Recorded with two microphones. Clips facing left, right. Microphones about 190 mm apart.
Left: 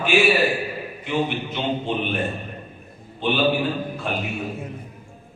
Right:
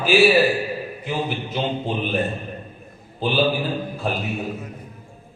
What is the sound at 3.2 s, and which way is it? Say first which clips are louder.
Speech: right 2 dB; 35° right (ahead or behind).